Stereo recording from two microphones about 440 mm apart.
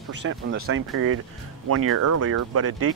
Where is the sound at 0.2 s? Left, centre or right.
Right.